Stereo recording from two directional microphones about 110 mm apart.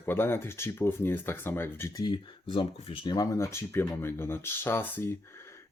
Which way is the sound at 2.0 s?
45° left (ahead or behind).